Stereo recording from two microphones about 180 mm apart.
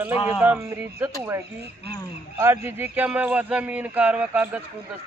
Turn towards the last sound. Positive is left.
turn(degrees=-5)  # may be behind; listen again after turning